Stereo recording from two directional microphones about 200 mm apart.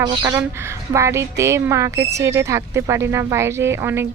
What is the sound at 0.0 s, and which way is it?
A woman's voice, 20° right (ahead or behind).